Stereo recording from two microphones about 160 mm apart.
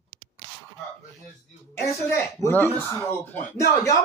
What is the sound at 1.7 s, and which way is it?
Speech, 15° left (ahead or behind).